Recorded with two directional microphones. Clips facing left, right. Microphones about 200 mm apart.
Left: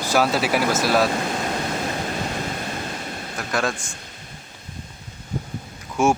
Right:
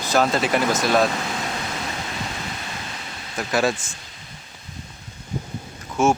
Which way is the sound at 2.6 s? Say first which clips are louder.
Left 5 dB; 45° left (ahead or behind).